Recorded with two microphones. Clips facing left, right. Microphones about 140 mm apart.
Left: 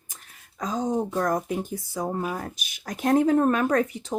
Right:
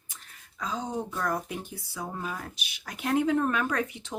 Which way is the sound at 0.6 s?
45° left (ahead or behind).